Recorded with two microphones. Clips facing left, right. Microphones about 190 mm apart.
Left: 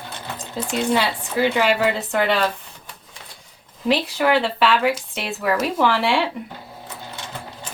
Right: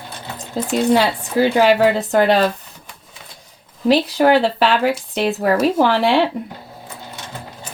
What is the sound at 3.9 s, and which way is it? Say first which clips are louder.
Speech: right 5 dB; 35° right (ahead or behind).